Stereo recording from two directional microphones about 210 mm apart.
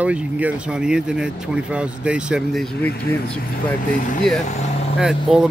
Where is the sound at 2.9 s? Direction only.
50° left (ahead or behind).